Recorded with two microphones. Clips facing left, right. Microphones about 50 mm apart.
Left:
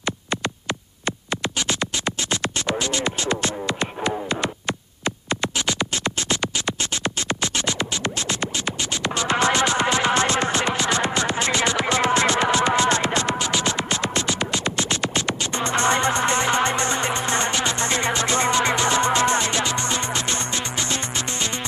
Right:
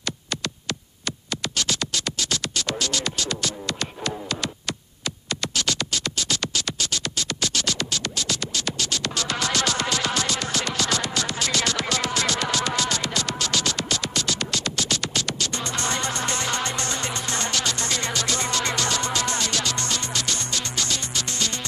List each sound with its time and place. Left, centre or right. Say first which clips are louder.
1.0 s music: left 4 dB; left